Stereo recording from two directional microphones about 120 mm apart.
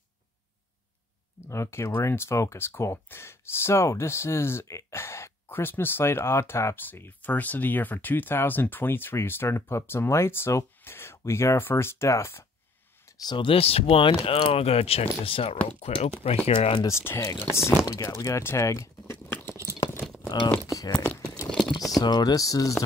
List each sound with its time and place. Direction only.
1.5 s speech: 25° left (ahead or behind)
13.0 s speech: 35° left (ahead or behind); by 16.7 s 60° left (ahead or behind)
16.7 s speech: 25° left (ahead or behind)
19.8 s a sound: 20° left (ahead or behind)
20.2 s a sound: 35° left (ahead or behind)
20.6 s speech: 30° left (ahead or behind)
20.9 s speech: 10° left (ahead or behind)
21.5 s typing: 10° left (ahead or behind)
21.9 s speech: 35° left (ahead or behind)